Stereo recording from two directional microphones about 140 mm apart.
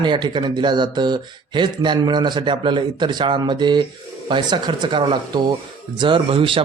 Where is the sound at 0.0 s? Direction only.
30° right (ahead or behind).